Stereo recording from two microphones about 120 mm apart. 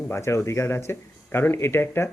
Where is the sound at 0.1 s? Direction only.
25° left (ahead or behind).